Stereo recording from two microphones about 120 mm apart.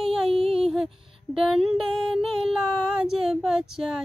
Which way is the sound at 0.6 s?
5° right (ahead or behind).